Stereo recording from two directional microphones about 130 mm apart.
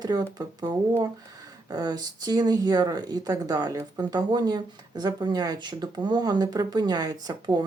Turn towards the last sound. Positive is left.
turn(degrees=-30)  # may be behind; listen again after turning